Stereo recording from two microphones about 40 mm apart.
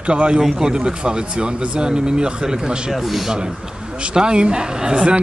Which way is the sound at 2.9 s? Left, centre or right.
Centre.